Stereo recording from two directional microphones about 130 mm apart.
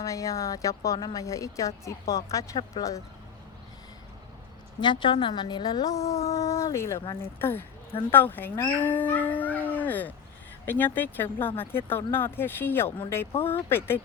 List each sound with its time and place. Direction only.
0.0 s a woman's voice: 25° left (ahead or behind)
4.8 s a woman's voice: 35° left (ahead or behind); by 8.6 s 15° left (ahead or behind)
8.8 s howl: 15° left (ahead or behind)
10.7 s speech: 15° left (ahead or behind)